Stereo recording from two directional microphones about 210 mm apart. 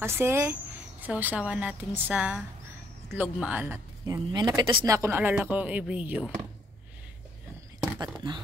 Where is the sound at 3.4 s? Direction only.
10° right (ahead or behind).